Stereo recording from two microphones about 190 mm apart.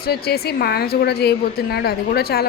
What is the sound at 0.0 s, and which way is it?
A woman's voice, 55° left (ahead or behind).